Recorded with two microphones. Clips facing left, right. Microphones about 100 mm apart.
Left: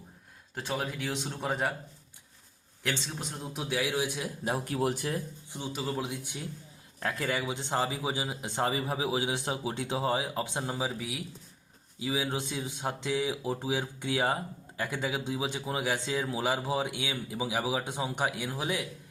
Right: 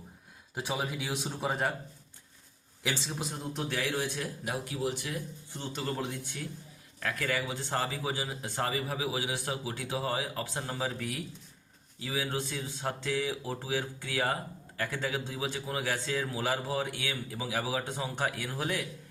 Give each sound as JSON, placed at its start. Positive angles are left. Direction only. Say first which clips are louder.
{"t": 0.5, "sound": "speech", "louder": "even", "side_deg": -10}
{"t": 2.8, "sound": "a man's voice", "louder": "even", "side_deg": -5}
{"t": 4.6, "sound": "speech", "louder": "left 4 dB", "side_deg": 50}
{"t": 5.5, "sound": "a man's voice", "louder": "left 1 dB", "side_deg": 10}
{"t": 7.0, "sound": "a man's voice", "louder": "left 1 dB", "side_deg": 25}